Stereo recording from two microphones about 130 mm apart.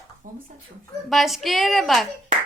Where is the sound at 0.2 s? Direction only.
80° right.